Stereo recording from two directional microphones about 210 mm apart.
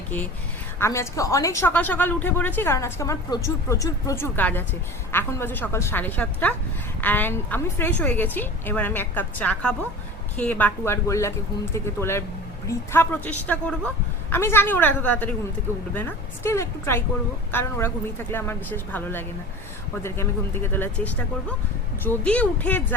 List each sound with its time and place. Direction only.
0.8 s a woman's voice: 15° left (ahead or behind)